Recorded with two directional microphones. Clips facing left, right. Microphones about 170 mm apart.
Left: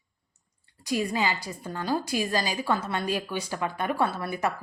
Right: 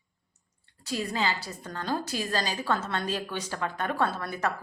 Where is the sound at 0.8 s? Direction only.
15° left (ahead or behind).